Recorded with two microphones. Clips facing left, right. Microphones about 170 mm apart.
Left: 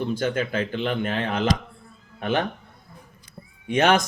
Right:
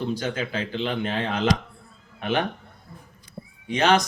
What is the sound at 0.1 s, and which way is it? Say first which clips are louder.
A man's voice: left 3 dB; 50° left (ahead or behind).